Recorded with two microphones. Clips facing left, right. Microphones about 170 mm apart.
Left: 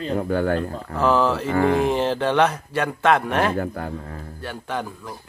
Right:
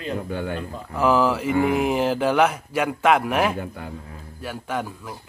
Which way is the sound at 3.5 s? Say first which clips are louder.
Left 6 dB; 50° left (ahead or behind).